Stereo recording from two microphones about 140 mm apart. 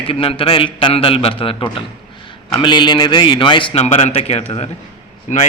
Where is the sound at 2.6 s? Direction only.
35° left (ahead or behind).